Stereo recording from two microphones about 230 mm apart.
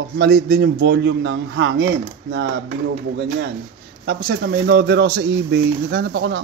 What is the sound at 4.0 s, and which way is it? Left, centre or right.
Speech, right.